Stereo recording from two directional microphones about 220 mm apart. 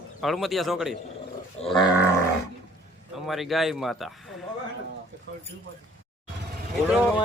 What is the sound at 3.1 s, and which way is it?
Speech, centre (ahead or behind).